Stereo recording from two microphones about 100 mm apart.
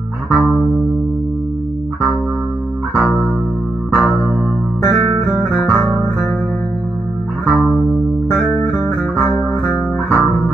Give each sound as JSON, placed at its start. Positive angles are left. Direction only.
{"t": 0.3, "sound": "music", "side_deg": 0}
{"t": 2.9, "sound": "music", "side_deg": 5}
{"t": 4.8, "sound": "guitar", "side_deg": 5}
{"t": 7.4, "sound": "music", "side_deg": 5}
{"t": 9.3, "sound": "music", "side_deg": 5}